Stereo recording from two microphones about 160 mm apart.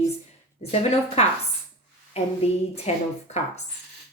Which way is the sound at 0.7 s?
40° left (ahead or behind).